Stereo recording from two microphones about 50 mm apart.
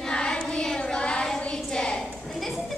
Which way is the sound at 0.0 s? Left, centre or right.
Centre.